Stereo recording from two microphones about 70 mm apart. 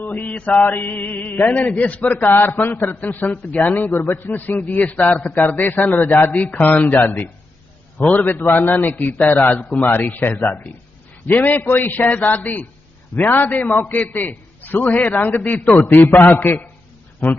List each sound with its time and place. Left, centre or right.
0.0 s a man's voice: left
8.3 s a man's voice: left